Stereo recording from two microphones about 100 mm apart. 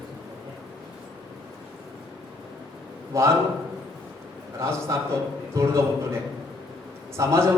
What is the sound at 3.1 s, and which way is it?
Speech, 30° right (ahead or behind).